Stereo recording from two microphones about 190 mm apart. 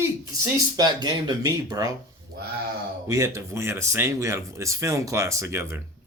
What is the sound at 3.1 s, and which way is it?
Speech, 15° right (ahead or behind).